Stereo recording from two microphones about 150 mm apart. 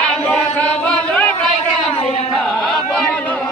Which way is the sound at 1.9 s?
40° left (ahead or behind).